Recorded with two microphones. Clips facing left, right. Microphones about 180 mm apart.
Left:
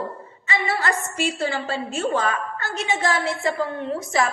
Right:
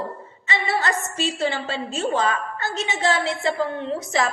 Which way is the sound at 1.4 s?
25° right (ahead or behind).